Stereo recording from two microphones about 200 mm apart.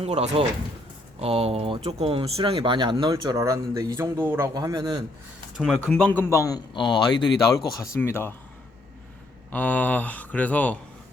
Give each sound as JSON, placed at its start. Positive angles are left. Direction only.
{"t": 0.0, "sound": "speech", "side_deg": -30}
{"t": 5.5, "sound": "a man's voice", "side_deg": 0}
{"t": 7.8, "sound": "a man's voice", "side_deg": 15}
{"t": 9.5, "sound": "a man's voice", "side_deg": 10}